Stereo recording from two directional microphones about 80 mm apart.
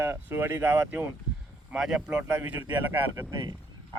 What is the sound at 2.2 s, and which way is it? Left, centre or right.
Speech, right.